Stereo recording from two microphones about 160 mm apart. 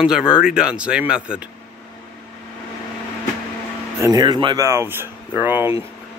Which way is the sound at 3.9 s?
20° right (ahead or behind).